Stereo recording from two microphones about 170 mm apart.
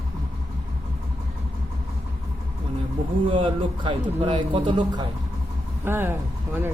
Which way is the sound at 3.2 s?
30° right (ahead or behind).